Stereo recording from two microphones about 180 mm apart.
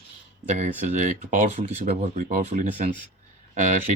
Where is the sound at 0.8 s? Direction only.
45° right (ahead or behind).